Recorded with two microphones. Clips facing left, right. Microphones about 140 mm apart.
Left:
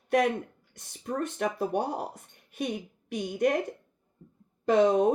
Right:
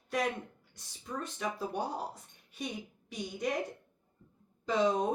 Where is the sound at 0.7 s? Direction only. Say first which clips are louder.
Left 8 dB; 60° left (ahead or behind).